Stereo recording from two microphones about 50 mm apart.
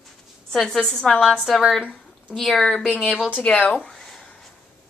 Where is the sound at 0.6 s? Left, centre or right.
Centre.